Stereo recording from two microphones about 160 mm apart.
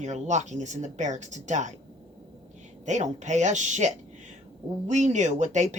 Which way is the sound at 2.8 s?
50° right (ahead or behind).